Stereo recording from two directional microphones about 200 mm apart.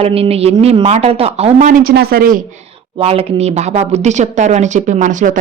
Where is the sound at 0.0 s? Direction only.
30° right (ahead or behind); by 2.4 s 45° right (ahead or behind).